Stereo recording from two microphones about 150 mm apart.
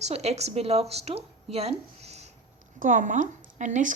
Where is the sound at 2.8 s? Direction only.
60° right (ahead or behind).